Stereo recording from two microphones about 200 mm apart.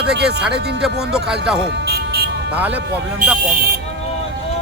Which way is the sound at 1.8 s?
55° right (ahead or behind).